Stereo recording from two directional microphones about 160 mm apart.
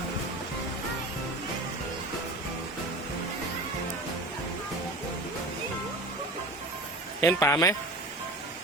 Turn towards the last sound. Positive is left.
turn(degrees=15)  # may be behind; listen again after turning